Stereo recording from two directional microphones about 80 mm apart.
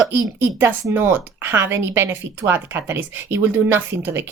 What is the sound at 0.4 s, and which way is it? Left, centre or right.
A woman's voice, right.